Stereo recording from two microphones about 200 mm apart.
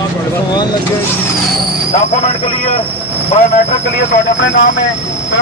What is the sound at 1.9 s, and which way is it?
Speech, 30° left (ahead or behind).